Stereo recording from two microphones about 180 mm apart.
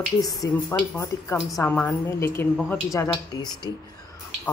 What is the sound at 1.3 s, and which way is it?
A woman's voice, centre (ahead or behind).